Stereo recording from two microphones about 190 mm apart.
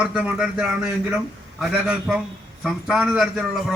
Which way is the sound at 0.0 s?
5° right (ahead or behind).